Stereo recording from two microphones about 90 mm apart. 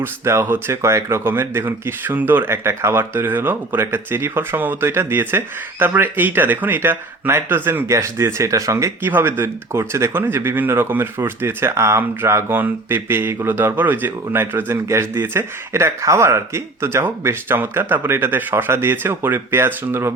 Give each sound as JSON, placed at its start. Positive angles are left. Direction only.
{"t": 0.0, "sound": "speech", "side_deg": -25}
{"t": 9.0, "sound": "speech", "side_deg": -20}